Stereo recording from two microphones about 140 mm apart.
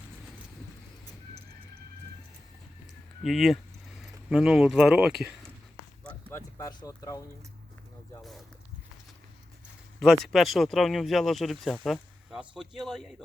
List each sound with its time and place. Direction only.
3.2 s speech: centre (ahead or behind)
6.3 s speech: 25° left (ahead or behind)
10.0 s speech: centre (ahead or behind)